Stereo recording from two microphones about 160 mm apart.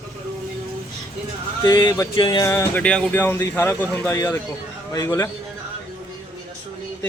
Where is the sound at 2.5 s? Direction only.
10° left (ahead or behind).